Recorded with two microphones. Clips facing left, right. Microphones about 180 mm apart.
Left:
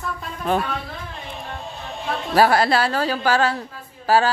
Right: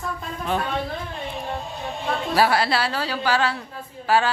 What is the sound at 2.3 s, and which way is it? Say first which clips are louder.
A woman's voice: left 4 dB; 45° left (ahead or behind).